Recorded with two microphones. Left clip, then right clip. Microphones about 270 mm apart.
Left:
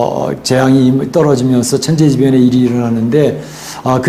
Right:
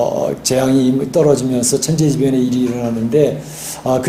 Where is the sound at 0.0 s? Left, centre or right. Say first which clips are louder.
Left 2 dB; left.